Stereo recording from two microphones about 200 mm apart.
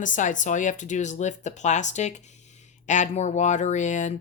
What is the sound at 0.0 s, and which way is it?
Speech, 40° left (ahead or behind).